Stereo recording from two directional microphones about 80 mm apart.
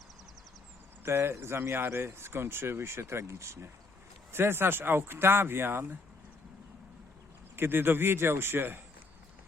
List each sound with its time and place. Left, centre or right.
1.0 s speech: right
7.5 s speech: right